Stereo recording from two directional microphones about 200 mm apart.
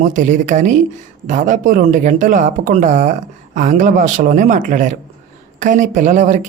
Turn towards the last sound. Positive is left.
turn(degrees=-40)  # may be behind; listen again after turning